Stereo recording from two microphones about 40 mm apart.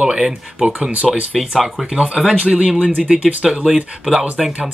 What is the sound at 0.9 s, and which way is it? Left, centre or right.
Speech, right.